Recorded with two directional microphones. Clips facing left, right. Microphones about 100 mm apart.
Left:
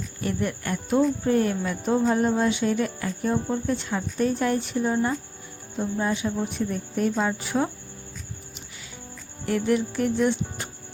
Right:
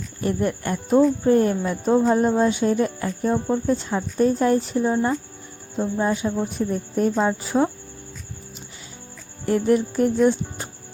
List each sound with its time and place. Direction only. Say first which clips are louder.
0.2 s speech: right 5 dB; 35° right (ahead or behind)
9.5 s speech: right 4 dB; 35° right (ahead or behind)